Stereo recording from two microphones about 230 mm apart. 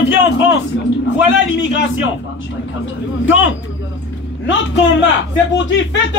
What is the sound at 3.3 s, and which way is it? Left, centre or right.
Speech, left.